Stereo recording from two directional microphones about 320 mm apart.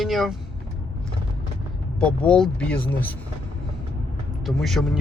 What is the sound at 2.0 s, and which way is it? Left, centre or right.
Speech, centre.